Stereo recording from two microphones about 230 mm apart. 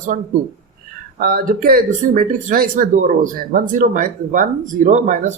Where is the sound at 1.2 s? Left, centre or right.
Right.